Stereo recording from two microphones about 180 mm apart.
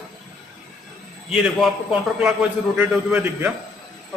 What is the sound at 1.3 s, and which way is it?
A man's voice, 5° right (ahead or behind).